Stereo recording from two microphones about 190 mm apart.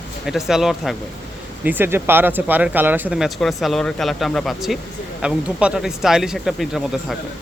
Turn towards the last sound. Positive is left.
turn(degrees=0)  # may be behind; listen again after turning